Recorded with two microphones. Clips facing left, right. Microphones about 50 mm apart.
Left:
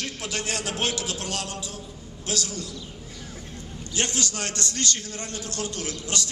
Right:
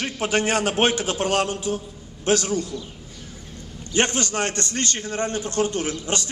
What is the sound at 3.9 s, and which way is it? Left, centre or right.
A man's voice, right.